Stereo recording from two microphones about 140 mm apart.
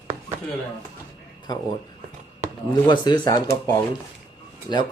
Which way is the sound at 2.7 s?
30° left (ahead or behind).